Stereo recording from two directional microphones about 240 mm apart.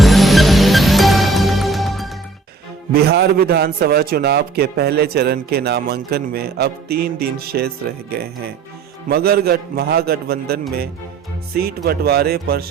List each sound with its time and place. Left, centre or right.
0.0 s music: centre
2.9 s a man's voice: right
11.9 s a man's voice: right